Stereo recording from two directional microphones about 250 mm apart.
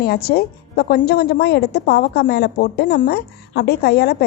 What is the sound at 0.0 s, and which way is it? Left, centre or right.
A woman's voice, left.